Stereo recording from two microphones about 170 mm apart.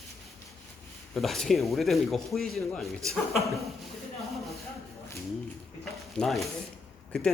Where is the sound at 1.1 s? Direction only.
Centre (ahead or behind).